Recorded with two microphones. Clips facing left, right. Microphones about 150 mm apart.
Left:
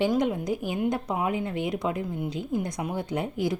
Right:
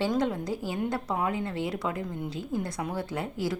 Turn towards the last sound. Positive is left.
turn(degrees=20)  # may be behind; listen again after turning